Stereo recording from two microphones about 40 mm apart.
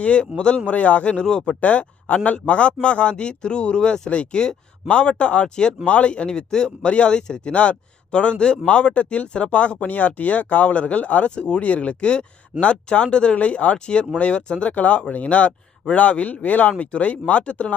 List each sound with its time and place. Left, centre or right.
0.0 s speech: left
0.8 s speech: left
1.5 s speech: left
13.3 s speech: left
14.7 s speech: left